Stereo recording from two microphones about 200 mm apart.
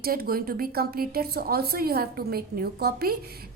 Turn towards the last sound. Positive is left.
turn(degrees=-50)  # may be behind; listen again after turning